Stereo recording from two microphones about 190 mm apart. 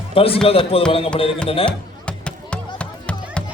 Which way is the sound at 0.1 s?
30° left (ahead or behind).